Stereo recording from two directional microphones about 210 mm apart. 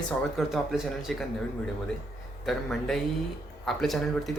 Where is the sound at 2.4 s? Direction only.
Centre (ahead or behind).